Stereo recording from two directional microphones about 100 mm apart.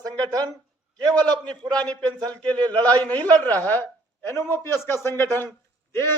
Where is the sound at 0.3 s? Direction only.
40° right (ahead or behind).